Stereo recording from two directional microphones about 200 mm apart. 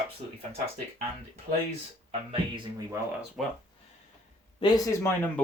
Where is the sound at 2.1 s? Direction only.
25° right (ahead or behind).